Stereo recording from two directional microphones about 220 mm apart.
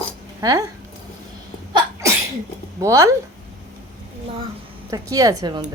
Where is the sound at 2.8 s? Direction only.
15° right (ahead or behind).